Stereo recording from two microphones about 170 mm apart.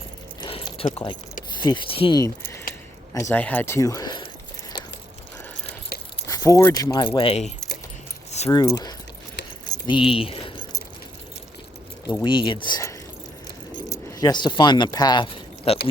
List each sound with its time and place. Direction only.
0.4 s a sound: 30° left (ahead or behind)
1.5 s speech: 25° left (ahead or behind)
2.4 s speech: 15° left (ahead or behind)
5.9 s keys jangling: 65° left (ahead or behind)
6.2 s speech: 20° left (ahead or behind); by 7.5 s 35° left (ahead or behind)
8.4 s speech: 25° left (ahead or behind)
9.6 s keys jangling: 25° left (ahead or behind)
10.1 s a sound: 30° left (ahead or behind)
12.2 s speech: 30° left (ahead or behind)